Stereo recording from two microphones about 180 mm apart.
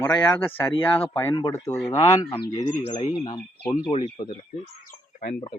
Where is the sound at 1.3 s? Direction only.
30° left (ahead or behind).